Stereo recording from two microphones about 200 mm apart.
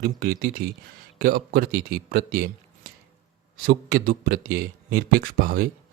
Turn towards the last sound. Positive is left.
turn(degrees=-45)  # may be behind; listen again after turning